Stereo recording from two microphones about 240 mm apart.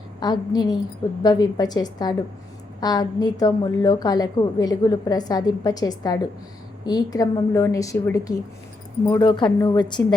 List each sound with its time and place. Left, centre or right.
0.2 s a woman's voice: centre